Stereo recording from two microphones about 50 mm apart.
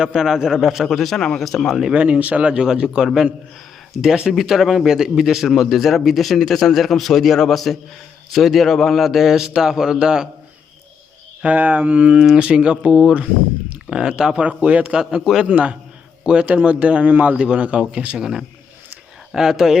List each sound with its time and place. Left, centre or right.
0.0 s a man's voice: centre
1.1 s speech: centre
1.4 s speech: centre
1.9 s a man's voice: right
11.4 s speech: right
14.9 s a man's voice: centre
15.4 s speech: right
17.1 s a man's voice: right
17.3 s speech: centre
18.2 s a man's voice: centre